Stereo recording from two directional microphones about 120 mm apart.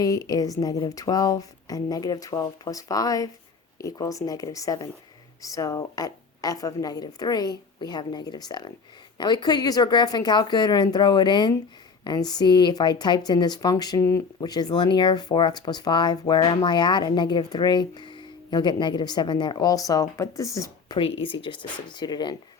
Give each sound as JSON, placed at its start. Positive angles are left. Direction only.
{"t": 0.0, "sound": "speech", "side_deg": 30}
{"t": 20.9, "sound": "speech", "side_deg": 45}